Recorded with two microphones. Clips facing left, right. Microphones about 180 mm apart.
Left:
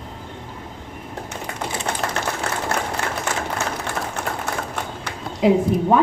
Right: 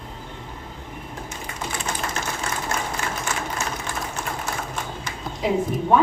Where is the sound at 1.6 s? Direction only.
65° left (ahead or behind).